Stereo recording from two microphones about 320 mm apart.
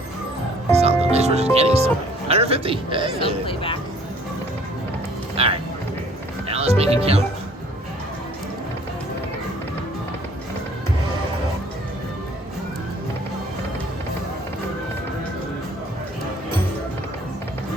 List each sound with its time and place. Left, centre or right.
0.7 s music: centre
3.4 s speech: centre
5.4 s speech: centre